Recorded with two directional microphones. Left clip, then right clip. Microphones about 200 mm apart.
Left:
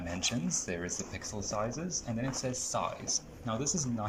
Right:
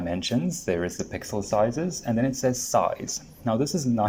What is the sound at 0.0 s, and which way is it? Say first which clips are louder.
Speech: right 7 dB; 40° right (ahead or behind).